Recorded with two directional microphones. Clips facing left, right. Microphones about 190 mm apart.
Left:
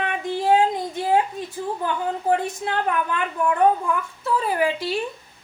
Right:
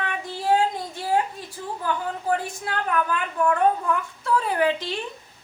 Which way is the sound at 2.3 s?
25° left (ahead or behind).